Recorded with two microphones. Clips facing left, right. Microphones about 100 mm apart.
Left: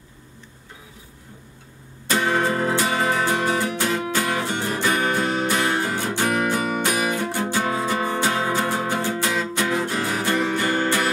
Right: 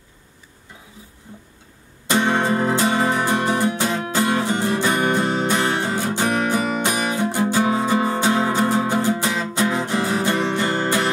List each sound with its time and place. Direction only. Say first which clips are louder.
2.0 s music: right 2 dB; 20° right (ahead or behind)